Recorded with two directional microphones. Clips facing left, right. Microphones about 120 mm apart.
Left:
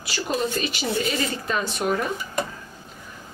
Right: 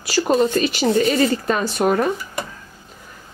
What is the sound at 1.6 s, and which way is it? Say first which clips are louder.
Speech: right 5 dB; 75° right (ahead or behind).